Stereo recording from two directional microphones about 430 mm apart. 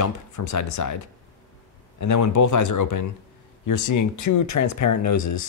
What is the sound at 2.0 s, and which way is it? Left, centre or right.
Speech, left.